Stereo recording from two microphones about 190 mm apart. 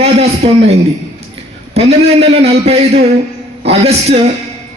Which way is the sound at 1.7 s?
30° right (ahead or behind).